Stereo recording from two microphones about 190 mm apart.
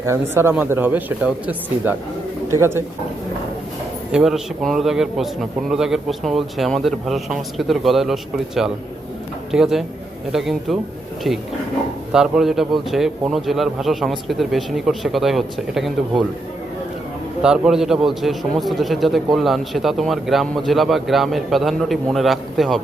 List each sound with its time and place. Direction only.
0.0 s speech: 15° right (ahead or behind)
4.1 s a man's voice: centre (ahead or behind)
17.4 s a man's voice: 5° right (ahead or behind)